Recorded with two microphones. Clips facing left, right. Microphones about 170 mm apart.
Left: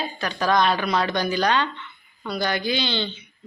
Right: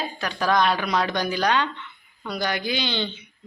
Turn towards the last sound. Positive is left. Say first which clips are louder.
# left 1 dB
turn(degrees=-15)  # may be behind; listen again after turning